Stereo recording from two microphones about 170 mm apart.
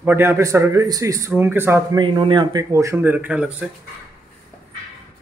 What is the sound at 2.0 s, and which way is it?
Speech, 30° right (ahead or behind).